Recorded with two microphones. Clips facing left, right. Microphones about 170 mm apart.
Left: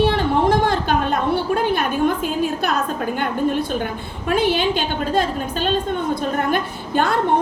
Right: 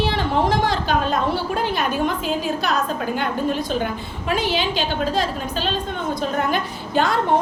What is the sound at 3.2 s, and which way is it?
A woman's voice, 50° left (ahead or behind).